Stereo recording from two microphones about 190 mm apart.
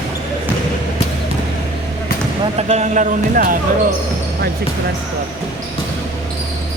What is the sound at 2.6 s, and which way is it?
Speech, 35° right (ahead or behind).